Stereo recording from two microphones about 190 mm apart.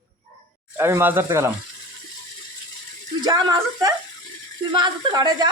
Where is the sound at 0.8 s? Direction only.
10° right (ahead or behind).